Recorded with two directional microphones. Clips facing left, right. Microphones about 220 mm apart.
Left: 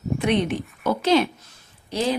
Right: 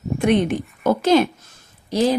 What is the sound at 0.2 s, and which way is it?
A woman's voice, 50° right (ahead or behind).